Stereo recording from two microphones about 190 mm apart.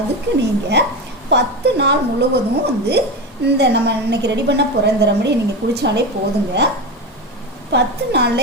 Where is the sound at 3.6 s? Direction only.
60° right (ahead or behind).